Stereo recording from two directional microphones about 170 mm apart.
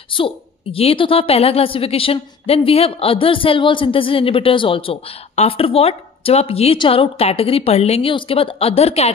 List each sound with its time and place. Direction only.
0.1 s a woman's voice: 30° left (ahead or behind)